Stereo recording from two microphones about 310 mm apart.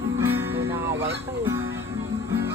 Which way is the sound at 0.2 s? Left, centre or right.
Centre.